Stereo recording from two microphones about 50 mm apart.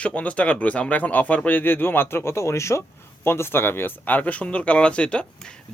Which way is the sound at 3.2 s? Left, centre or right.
Left.